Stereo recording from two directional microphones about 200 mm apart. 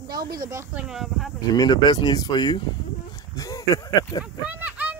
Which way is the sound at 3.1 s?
15° left (ahead or behind).